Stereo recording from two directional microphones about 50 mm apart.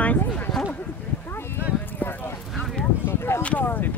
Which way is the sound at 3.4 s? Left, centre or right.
Left.